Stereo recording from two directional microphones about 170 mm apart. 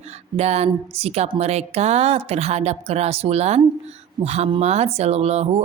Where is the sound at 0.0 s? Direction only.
40° right (ahead or behind).